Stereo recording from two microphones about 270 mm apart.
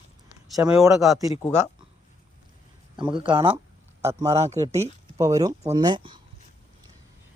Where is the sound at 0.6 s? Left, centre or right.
Centre.